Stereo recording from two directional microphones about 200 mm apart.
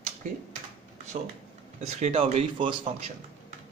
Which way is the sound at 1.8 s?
30° right (ahead or behind).